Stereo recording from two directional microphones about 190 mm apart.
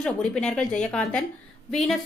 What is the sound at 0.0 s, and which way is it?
Speech, 5° left (ahead or behind).